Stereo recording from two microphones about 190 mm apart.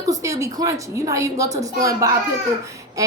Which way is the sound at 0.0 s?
15° right (ahead or behind).